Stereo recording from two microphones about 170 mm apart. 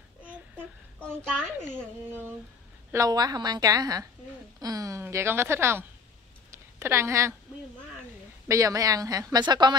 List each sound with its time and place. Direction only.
2.9 s a woman's voice: 20° right (ahead or behind)
6.5 s a sound: 15° right (ahead or behind)
8.5 s a woman's voice: 20° right (ahead or behind)